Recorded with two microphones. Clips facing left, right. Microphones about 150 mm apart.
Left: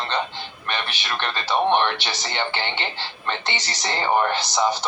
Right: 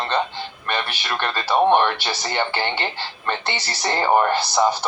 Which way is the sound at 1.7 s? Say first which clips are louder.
Right 3 dB; 45° right (ahead or behind).